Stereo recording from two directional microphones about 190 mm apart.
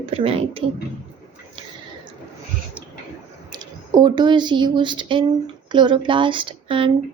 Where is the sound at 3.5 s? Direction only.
20° right (ahead or behind).